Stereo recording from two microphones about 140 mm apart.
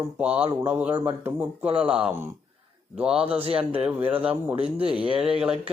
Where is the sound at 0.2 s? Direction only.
10° right (ahead or behind).